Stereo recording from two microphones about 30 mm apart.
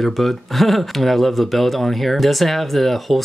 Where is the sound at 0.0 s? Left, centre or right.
Centre.